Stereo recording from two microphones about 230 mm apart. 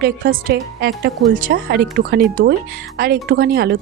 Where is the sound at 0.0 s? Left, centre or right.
Right.